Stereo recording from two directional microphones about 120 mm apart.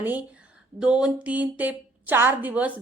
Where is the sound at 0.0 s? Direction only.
15° right (ahead or behind).